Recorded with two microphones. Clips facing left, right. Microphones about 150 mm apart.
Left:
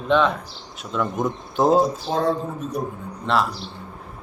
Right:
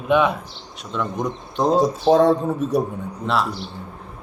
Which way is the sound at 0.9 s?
5° left (ahead or behind).